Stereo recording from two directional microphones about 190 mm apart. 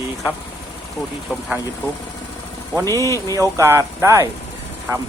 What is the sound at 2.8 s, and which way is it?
Speech, 15° left (ahead or behind).